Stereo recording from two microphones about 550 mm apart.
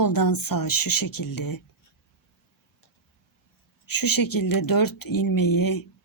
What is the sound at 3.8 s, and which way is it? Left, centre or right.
Speech, left.